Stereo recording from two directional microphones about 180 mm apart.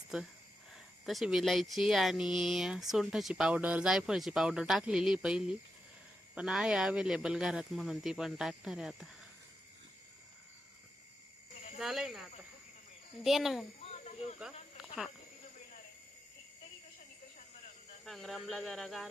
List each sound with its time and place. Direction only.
1.0 s speech: centre (ahead or behind)
11.8 s speech: centre (ahead or behind)
13.2 s speech: centre (ahead or behind)
13.9 s insect: 35° left (ahead or behind)
18.0 s speech: centre (ahead or behind)